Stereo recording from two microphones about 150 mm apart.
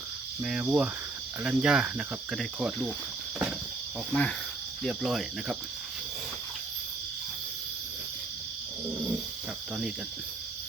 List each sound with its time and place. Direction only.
0.4 s cricket: 10° right (ahead or behind)
4.1 s speech: 10° left (ahead or behind)
4.8 s cricket: centre (ahead or behind)